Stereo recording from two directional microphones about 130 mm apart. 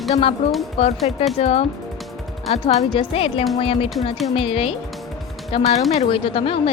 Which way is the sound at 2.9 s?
45° left (ahead or behind).